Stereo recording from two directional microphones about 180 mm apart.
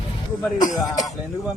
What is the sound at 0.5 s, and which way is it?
Speech, 45° left (ahead or behind).